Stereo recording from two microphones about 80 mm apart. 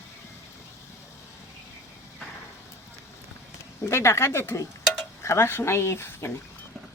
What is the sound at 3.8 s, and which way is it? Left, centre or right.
Speech, left.